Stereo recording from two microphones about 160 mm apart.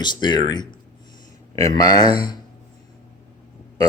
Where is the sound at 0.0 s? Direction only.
25° left (ahead or behind).